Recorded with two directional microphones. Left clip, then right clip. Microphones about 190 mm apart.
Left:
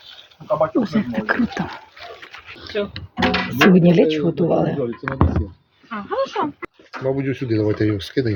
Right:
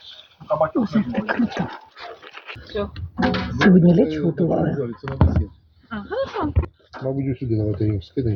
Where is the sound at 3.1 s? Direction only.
50° left (ahead or behind).